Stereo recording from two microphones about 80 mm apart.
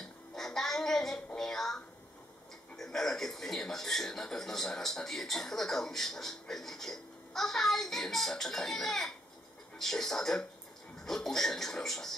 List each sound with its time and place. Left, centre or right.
0.0 s music: centre
2.8 s a man's voice: centre